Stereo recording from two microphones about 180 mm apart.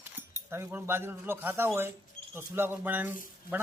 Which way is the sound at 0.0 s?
10° right (ahead or behind).